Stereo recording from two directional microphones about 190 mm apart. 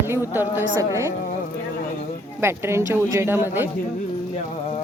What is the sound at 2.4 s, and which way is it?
Speech, 15° right (ahead or behind).